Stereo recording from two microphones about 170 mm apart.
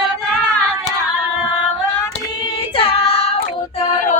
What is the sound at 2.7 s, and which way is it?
Child singing, 35° left (ahead or behind).